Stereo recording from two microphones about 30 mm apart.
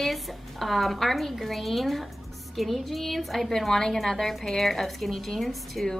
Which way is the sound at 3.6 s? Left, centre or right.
Centre.